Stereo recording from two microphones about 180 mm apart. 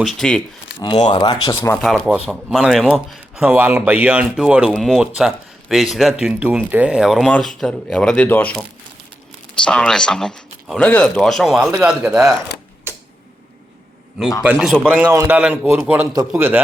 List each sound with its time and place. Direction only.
0.0 s speech: centre (ahead or behind)
1.0 s speech: 25° left (ahead or behind)
1.8 s speech: centre (ahead or behind)
9.6 s a man's voice: 5° left (ahead or behind)
14.4 s a man's voice: centre (ahead or behind)